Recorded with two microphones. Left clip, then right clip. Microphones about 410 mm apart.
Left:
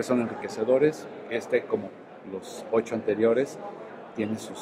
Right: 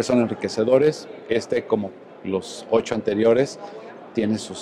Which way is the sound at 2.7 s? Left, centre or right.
Right.